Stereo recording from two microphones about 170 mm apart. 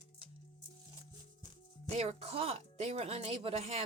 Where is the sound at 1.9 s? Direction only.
40° right (ahead or behind).